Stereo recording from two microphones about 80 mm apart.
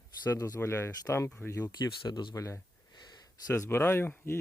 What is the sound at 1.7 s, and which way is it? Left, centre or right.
Speech, left.